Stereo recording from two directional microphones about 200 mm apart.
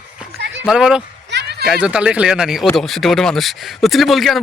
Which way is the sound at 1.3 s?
55° right (ahead or behind).